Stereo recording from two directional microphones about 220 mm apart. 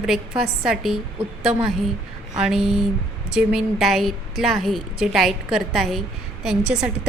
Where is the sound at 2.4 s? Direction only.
Centre (ahead or behind).